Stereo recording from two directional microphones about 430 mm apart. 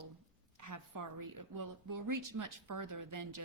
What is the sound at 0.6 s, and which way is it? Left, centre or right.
A woman's voice, right.